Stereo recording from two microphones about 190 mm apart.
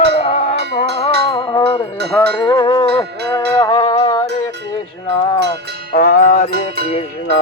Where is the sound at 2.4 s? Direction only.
20° left (ahead or behind).